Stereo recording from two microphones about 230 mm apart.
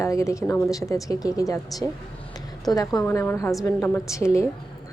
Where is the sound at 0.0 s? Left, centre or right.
Centre.